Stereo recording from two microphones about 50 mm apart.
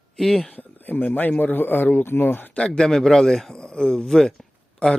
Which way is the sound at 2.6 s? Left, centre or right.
Centre.